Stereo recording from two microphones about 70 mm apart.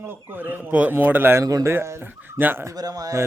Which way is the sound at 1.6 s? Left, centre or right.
Right.